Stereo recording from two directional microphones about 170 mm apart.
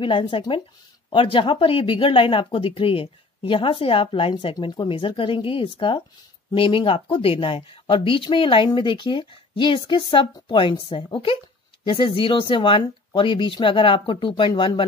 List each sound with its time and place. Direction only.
0.0 s speech: 30° left (ahead or behind)